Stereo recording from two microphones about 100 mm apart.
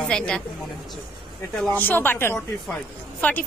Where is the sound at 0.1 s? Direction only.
10° left (ahead or behind).